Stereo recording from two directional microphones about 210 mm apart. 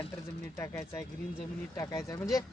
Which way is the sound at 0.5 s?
15° left (ahead or behind).